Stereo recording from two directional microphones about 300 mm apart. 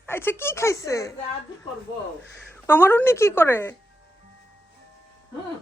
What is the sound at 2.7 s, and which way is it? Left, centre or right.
A woman's voice, centre.